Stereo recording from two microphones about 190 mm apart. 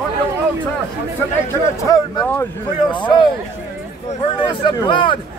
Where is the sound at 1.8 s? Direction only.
20° left (ahead or behind).